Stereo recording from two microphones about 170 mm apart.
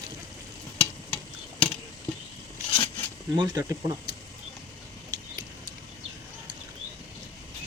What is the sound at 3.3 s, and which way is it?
Speech, 20° right (ahead or behind).